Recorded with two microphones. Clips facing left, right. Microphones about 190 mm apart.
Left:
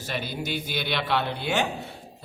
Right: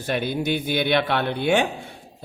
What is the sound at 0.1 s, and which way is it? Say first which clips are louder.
A man's voice: right 7 dB; 55° right (ahead or behind).